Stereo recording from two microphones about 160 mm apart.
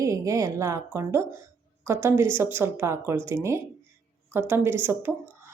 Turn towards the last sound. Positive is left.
turn(degrees=-15)  # may be behind; listen again after turning